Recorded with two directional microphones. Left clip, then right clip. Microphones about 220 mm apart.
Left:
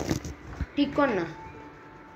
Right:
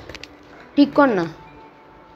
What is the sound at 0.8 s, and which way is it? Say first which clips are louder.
Speech: right 9 dB; 45° right (ahead or behind).